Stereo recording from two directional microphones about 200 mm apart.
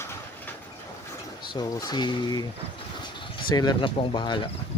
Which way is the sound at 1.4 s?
20° left (ahead or behind).